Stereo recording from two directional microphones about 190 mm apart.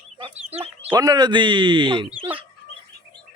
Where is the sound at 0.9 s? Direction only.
20° right (ahead or behind).